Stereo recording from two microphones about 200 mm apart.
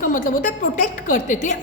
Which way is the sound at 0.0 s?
40° left (ahead or behind).